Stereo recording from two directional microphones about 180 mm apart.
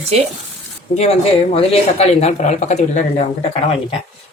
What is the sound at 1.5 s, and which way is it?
Speech, 35° left (ahead or behind).